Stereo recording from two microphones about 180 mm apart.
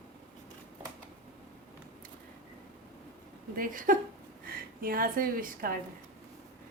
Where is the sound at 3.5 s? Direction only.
50° right (ahead or behind).